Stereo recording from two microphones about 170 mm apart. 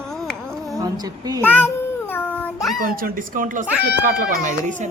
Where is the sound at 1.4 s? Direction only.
10° left (ahead or behind).